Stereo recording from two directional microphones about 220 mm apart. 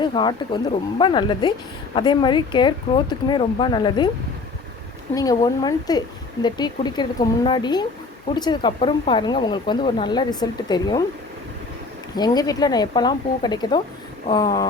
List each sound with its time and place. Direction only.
0.0 s speech: 20° left (ahead or behind)
5.1 s speech: 15° left (ahead or behind)
12.1 s speech: 20° left (ahead or behind)